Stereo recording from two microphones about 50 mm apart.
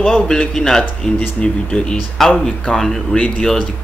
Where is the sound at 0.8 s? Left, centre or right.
Left.